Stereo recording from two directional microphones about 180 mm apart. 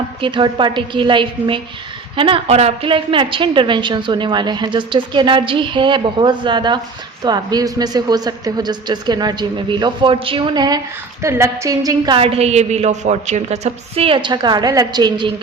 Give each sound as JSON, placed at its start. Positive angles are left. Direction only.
{"t": 0.2, "sound": "a woman's voice", "side_deg": -25}